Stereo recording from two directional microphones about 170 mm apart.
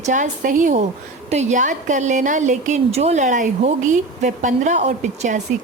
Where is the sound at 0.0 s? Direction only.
50° right (ahead or behind).